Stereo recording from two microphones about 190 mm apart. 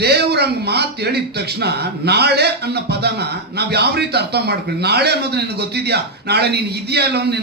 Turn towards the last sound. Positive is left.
turn(degrees=-60)  # may be behind; listen again after turning